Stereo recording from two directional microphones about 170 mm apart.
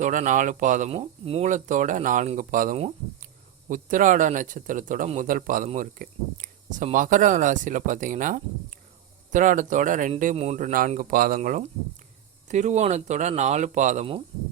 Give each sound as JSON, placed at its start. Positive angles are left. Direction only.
{"t": 0.0, "sound": "speech", "side_deg": -50}
{"t": 0.9, "sound": "speech", "side_deg": -35}